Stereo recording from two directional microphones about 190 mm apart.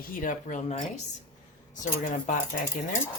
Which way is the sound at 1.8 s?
40° left (ahead or behind).